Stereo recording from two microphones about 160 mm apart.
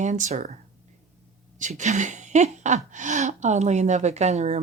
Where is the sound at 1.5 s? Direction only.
50° right (ahead or behind).